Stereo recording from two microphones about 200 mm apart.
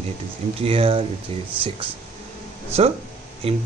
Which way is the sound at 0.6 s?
30° right (ahead or behind).